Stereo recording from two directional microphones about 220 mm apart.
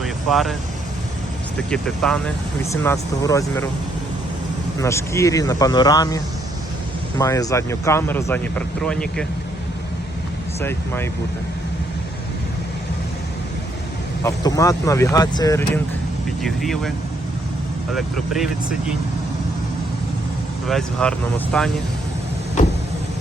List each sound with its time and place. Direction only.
0.0 s vehicle: centre (ahead or behind)
1.5 s speech: 5° left (ahead or behind)
2.8 s speech: 15° left (ahead or behind)
4.8 s speech: 15° left (ahead or behind)
10.6 s speech: 10° left (ahead or behind)
14.3 s speech: 15° left (ahead or behind)
16.4 s speech: centre (ahead or behind)
17.9 s speech: 5° right (ahead or behind)
20.7 s speech: 5° left (ahead or behind)